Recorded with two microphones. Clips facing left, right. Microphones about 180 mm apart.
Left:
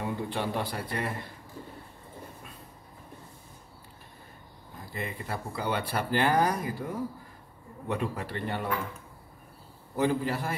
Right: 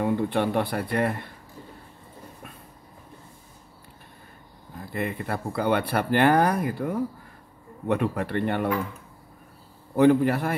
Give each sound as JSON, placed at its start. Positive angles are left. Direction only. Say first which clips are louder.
{"t": 0.0, "sound": "speech", "louder": "right 8 dB", "side_deg": -60}
{"t": 4.9, "sound": "speech", "louder": "right 7 dB", "side_deg": -60}
{"t": 9.9, "sound": "speech", "louder": "right 9 dB", "side_deg": -60}